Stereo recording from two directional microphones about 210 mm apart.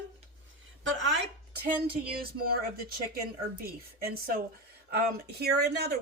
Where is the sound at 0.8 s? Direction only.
60° right (ahead or behind).